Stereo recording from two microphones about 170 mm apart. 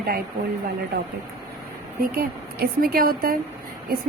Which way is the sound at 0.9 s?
70° right (ahead or behind).